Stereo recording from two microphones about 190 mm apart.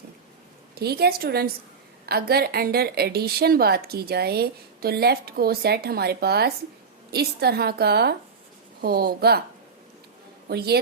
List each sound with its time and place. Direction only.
0.8 s a woman's voice: 55° right (ahead or behind)
10.5 s a woman's voice: 60° right (ahead or behind)